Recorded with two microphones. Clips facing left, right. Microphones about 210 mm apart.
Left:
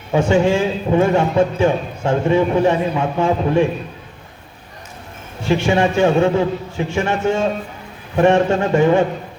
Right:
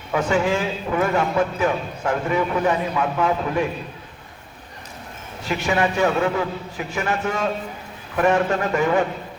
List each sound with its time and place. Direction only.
0.1 s a man's voice: 25° left (ahead or behind)
5.4 s a man's voice: 25° left (ahead or behind)